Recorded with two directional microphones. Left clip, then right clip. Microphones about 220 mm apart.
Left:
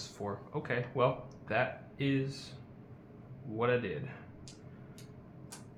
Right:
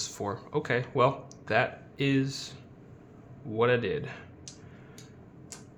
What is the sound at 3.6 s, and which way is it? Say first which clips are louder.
Speech: right 6 dB; 45° right (ahead or behind).